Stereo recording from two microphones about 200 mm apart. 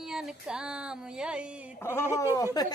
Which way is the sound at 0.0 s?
5° right (ahead or behind).